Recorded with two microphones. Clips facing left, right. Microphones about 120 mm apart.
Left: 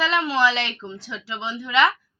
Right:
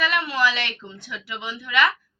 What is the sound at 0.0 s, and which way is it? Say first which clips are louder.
A woman's voice: left 2 dB; 25° left (ahead or behind).